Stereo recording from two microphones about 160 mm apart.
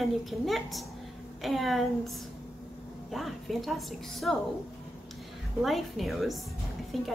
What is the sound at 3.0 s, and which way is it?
Speech, centre (ahead or behind).